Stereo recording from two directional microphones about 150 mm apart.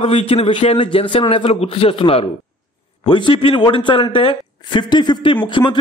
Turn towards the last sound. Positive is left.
turn(degrees=30)  # may be behind; listen again after turning